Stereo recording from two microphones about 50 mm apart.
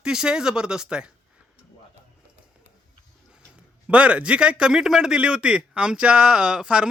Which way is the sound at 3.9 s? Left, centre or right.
Right.